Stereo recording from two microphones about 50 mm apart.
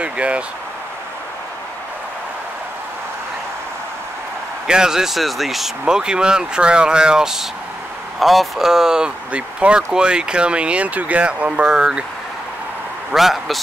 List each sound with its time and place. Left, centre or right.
0.0 s speech: right
4.6 s speech: centre
5.9 s speech: centre
8.2 s speech: centre
9.3 s speech: right
13.1 s speech: centre